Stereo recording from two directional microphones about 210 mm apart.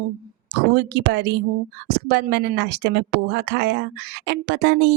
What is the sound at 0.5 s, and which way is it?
Speech, 50° right (ahead or behind).